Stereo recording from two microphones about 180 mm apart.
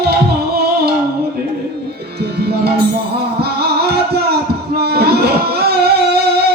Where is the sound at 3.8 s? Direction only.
60° right (ahead or behind).